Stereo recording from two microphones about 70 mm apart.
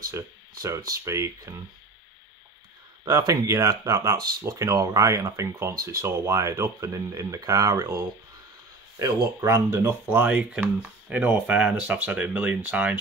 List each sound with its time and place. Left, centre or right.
0.6 s speech: right
1.1 s speech: right
3.1 s speech: right
10.0 s speech: right